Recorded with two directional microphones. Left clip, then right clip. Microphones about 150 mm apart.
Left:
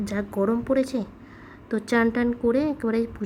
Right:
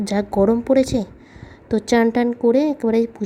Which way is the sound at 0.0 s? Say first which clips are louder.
Right 8 dB; 30° right (ahead or behind).